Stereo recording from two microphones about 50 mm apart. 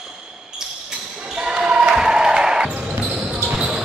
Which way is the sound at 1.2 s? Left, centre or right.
Centre.